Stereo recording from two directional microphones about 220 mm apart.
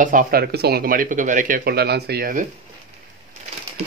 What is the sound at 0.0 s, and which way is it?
Speech, 35° right (ahead or behind).